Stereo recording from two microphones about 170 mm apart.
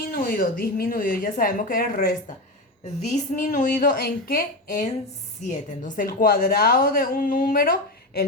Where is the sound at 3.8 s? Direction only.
65° left (ahead or behind).